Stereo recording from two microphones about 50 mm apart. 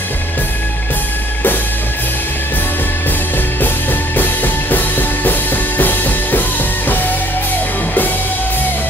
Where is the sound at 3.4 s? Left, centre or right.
Left.